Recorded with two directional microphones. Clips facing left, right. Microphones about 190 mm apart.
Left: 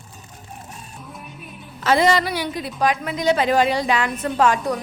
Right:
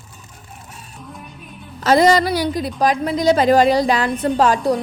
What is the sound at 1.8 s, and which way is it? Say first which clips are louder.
A woman's voice: right 4 dB; 40° right (ahead or behind).